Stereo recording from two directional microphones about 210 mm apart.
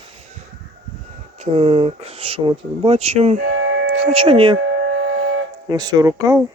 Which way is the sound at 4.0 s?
25° right (ahead or behind).